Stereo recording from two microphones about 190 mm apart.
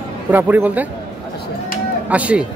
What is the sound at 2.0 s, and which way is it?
Speech, 5° right (ahead or behind).